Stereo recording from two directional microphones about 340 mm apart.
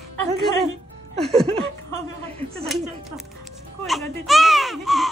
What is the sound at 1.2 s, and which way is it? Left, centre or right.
Speech, centre.